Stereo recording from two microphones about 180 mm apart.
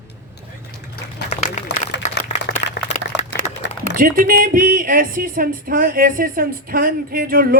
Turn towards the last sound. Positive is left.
turn(degrees=-55)  # may be behind; listen again after turning